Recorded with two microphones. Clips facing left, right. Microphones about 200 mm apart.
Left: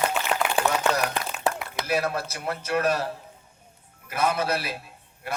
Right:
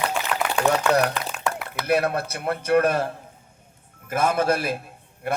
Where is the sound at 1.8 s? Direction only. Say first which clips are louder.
Right 4 dB; 60° right (ahead or behind).